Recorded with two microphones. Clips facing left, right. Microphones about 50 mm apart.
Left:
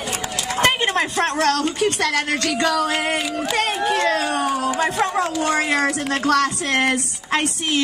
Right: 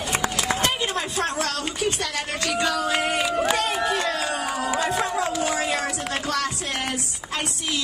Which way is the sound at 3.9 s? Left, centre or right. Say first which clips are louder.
Left 5 dB; left.